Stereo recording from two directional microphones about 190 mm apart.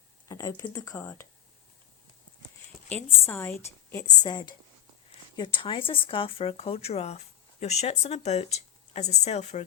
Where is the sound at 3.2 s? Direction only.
10° left (ahead or behind); by 9.6 s 35° left (ahead or behind).